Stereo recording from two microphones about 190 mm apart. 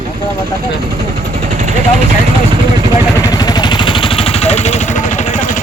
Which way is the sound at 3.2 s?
20° left (ahead or behind).